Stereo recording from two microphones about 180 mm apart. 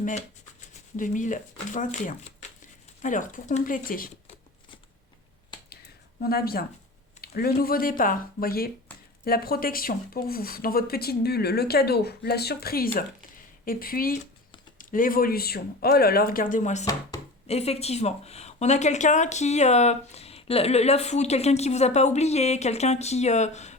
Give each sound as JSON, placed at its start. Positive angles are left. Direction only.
{"t": 0.0, "sound": "speech", "side_deg": 40}
{"t": 6.2, "sound": "speech", "side_deg": 55}